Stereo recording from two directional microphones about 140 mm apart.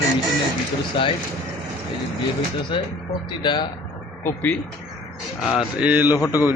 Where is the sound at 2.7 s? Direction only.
40° left (ahead or behind).